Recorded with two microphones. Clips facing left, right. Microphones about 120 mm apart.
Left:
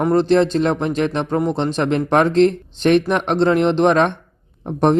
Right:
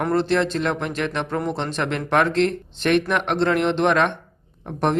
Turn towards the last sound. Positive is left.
turn(degrees=25)  # may be behind; listen again after turning